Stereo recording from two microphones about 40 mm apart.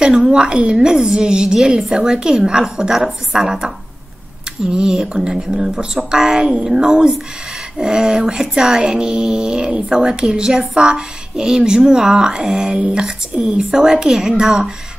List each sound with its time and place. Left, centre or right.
0.0 s a woman's voice: centre
4.7 s a woman's voice: centre